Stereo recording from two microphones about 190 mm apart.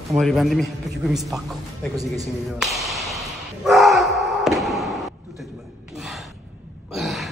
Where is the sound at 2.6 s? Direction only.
Centre (ahead or behind).